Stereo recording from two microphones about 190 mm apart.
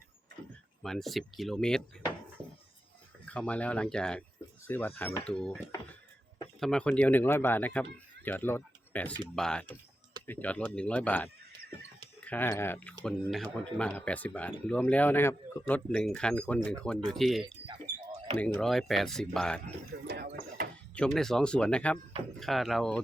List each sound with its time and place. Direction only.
0.8 s speech: centre (ahead or behind)
3.2 s speech: 5° left (ahead or behind)
6.6 s speech: 5° left (ahead or behind)
19.9 s a sound: 60° right (ahead or behind)
20.9 s speech: 5° left (ahead or behind)